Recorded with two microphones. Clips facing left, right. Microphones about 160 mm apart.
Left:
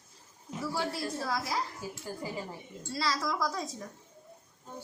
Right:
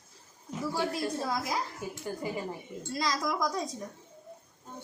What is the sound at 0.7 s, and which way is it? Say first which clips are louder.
A woman's voice: right 3 dB; 15° right (ahead or behind).